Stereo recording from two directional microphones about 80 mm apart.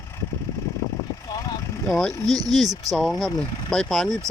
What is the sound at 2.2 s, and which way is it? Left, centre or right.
Speech, right.